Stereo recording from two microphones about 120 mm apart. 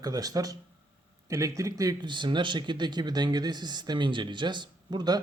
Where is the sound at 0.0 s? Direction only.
30° right (ahead or behind).